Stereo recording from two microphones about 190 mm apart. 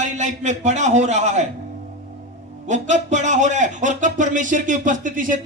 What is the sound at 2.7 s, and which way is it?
Speech, 40° right (ahead or behind).